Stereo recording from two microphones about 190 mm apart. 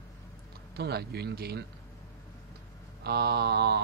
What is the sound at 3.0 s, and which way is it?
Speech, 60° right (ahead or behind).